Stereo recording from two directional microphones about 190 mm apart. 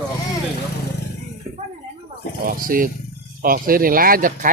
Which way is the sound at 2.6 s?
45° right (ahead or behind).